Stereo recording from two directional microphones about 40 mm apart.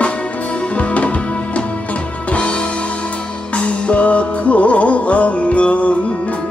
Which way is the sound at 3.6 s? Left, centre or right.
Left.